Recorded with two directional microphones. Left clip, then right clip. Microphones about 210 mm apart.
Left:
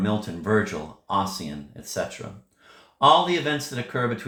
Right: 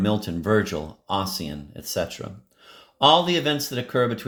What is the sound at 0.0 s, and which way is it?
Speech, 55° right (ahead or behind).